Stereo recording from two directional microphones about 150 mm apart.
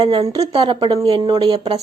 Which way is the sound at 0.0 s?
35° right (ahead or behind).